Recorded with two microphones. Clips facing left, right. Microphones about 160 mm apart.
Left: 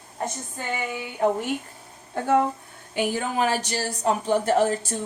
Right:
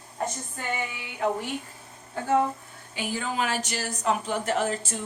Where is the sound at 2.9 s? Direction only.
50° left (ahead or behind); by 5.0 s 35° left (ahead or behind).